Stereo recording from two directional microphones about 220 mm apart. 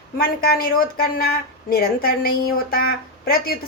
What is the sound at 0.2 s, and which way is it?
A woman's voice, 45° left (ahead or behind).